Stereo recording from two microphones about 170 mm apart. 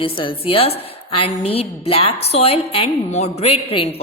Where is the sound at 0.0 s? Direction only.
30° left (ahead or behind).